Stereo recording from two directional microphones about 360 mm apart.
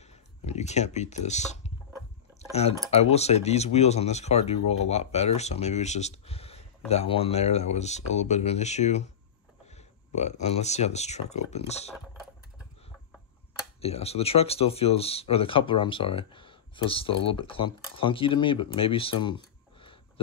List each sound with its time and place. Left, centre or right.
0.0 s a sound: centre
2.9 s speech: centre
13.7 s speech: centre